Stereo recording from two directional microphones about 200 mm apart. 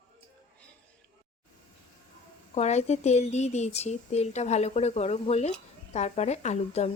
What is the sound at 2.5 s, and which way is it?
Speech, 35° left (ahead or behind).